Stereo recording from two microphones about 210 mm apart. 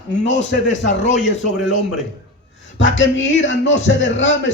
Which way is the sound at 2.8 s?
60° left (ahead or behind).